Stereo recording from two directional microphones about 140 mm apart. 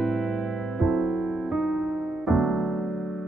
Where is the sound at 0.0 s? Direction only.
Centre (ahead or behind).